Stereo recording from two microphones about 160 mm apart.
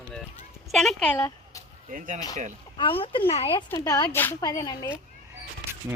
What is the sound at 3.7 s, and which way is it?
A woman's voice, 25° left (ahead or behind).